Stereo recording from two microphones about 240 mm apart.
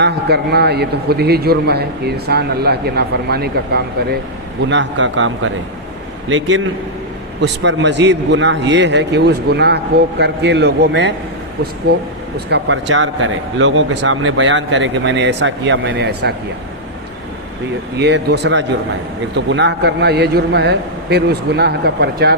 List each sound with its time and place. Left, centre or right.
0.0 s a man's voice: right
12.5 s speech: right
18.0 s speech: right